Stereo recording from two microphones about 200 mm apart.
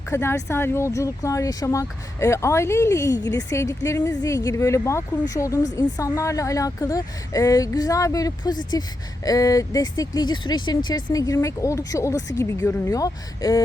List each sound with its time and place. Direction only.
0.1 s speech: 15° left (ahead or behind)